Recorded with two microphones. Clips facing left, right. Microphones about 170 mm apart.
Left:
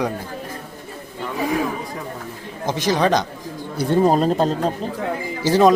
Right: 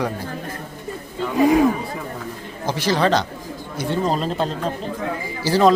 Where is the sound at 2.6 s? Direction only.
20° left (ahead or behind).